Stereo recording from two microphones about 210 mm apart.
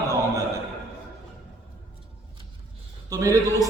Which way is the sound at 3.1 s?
15° right (ahead or behind).